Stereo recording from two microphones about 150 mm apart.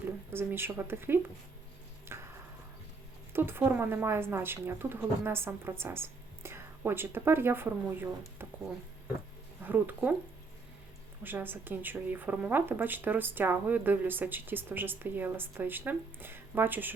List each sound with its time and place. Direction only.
0.3 s a woman's voice: 15° right (ahead or behind)
2.1 s tick-tock: 15° right (ahead or behind)
3.3 s a woman's voice: 15° right (ahead or behind)
9.6 s a woman's voice: 10° right (ahead or behind)
11.2 s a woman's voice: 15° right (ahead or behind)